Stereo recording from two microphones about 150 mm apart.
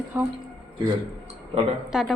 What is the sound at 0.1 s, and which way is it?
Speech, 15° right (ahead or behind).